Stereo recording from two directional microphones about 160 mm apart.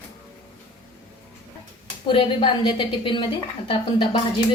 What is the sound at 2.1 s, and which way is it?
A woman's voice, 30° left (ahead or behind).